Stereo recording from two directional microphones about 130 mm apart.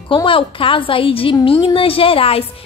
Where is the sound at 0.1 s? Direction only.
40° left (ahead or behind).